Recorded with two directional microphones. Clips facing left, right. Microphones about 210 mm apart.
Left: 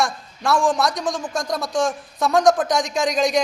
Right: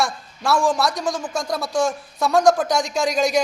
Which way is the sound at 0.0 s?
Centre (ahead or behind).